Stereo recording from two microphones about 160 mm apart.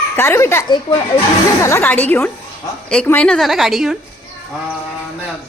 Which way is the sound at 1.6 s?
15° left (ahead or behind).